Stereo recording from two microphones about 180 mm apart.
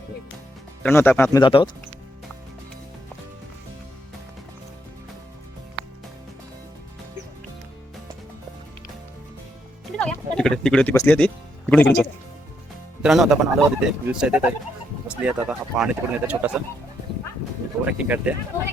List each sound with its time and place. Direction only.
0.8 s speech: 10° left (ahead or behind)
1.4 s speech: 25° left (ahead or behind)
10.0 s a sound: 5° left (ahead or behind)
10.9 s speech: 10° left (ahead or behind)
13.0 s speech: 5° right (ahead or behind)
17.8 s speech: 10° right (ahead or behind)